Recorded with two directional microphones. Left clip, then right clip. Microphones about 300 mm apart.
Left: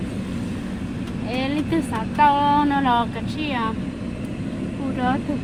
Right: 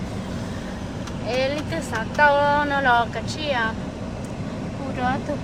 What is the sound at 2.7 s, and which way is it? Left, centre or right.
Speech, right.